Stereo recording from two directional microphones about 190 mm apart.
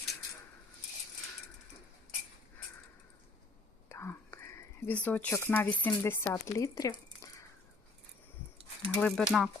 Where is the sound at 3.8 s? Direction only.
15° left (ahead or behind).